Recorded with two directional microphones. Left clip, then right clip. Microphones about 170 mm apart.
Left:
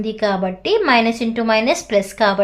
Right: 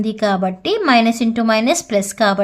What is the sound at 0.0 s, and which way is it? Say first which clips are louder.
A woman's voice: right 1 dB; 35° right (ahead or behind).